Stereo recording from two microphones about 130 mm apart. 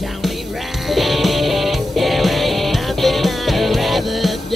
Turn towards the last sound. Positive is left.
turn(degrees=0)  # may be behind; listen again after turning